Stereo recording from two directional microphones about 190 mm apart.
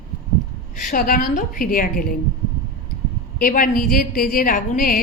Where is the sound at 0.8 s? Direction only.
45° left (ahead or behind).